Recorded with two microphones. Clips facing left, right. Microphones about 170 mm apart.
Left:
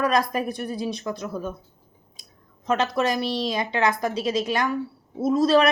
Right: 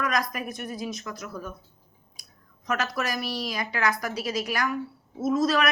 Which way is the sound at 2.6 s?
25° left (ahead or behind).